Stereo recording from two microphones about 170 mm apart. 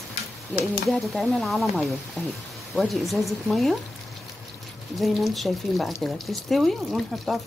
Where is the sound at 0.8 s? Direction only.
Centre (ahead or behind).